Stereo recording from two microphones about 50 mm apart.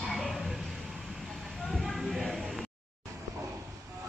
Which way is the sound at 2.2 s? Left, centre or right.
Centre.